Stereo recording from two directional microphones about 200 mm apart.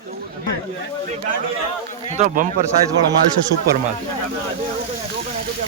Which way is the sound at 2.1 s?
40° right (ahead or behind).